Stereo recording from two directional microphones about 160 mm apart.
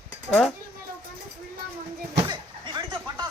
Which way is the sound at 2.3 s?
30° right (ahead or behind).